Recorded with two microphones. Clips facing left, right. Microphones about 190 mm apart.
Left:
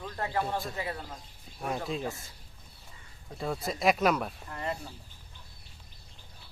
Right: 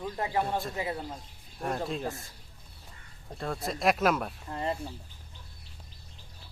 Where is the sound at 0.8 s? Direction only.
20° right (ahead or behind).